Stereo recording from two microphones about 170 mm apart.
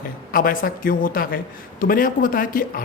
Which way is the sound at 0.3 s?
55° left (ahead or behind).